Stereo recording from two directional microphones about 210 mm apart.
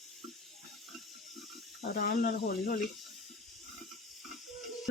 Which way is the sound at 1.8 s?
40° left (ahead or behind).